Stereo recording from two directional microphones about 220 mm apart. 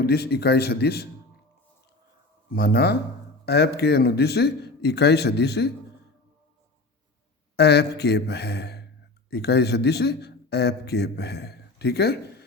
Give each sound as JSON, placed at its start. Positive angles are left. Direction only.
{"t": 0.0, "sound": "speech", "side_deg": 45}
{"t": 2.5, "sound": "speech", "side_deg": 45}
{"t": 7.5, "sound": "a man's voice", "side_deg": 50}